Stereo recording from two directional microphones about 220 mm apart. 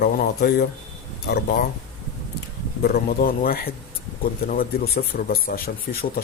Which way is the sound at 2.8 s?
45° left (ahead or behind).